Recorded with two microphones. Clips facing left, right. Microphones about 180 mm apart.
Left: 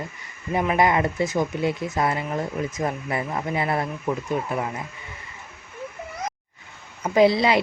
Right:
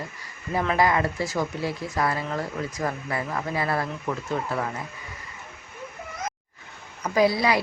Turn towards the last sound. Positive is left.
turn(degrees=25)  # may be behind; listen again after turning